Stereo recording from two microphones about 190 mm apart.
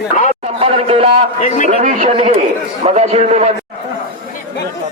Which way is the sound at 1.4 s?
40° left (ahead or behind).